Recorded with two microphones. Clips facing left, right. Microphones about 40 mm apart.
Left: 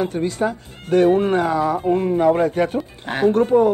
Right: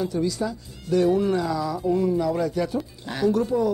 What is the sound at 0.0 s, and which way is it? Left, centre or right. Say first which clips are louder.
Speech: left 4 dB; left.